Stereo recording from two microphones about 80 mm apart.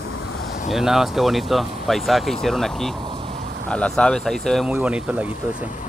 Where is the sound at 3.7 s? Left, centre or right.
Centre.